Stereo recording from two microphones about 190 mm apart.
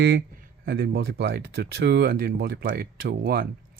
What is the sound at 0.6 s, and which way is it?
Speech, 55° right (ahead or behind).